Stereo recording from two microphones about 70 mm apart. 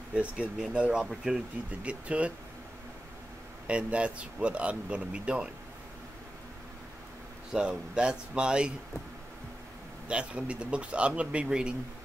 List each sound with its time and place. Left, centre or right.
0.1 s speech: centre
3.6 s speech: centre
7.5 s speech: centre
10.0 s speech: centre